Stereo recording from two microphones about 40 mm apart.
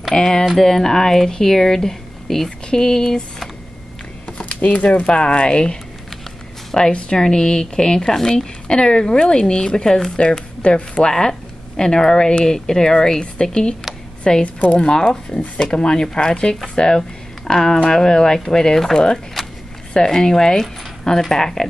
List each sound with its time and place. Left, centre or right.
0.1 s speech: centre
4.3 s speech: left
6.9 s speech: left
7.2 s speech: centre
19.4 s a sound: centre
19.9 s speech: centre